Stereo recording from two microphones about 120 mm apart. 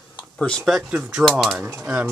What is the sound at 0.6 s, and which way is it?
Speech, centre (ahead or behind).